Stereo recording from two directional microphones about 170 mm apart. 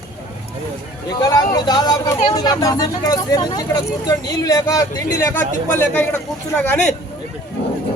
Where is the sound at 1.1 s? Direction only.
25° left (ahead or behind).